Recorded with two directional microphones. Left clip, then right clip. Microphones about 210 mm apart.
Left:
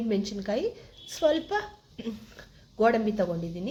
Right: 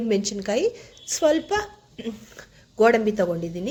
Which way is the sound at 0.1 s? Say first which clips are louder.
Right 7 dB; 20° right (ahead or behind).